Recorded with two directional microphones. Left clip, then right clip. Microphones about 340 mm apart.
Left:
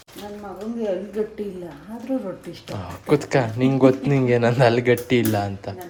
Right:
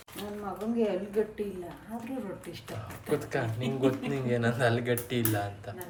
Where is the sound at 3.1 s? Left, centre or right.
Left.